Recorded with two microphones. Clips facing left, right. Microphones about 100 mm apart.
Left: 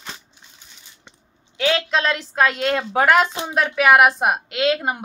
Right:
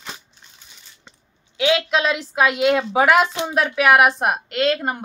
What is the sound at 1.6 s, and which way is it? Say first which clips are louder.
A woman's voice: right 1 dB; 5° right (ahead or behind).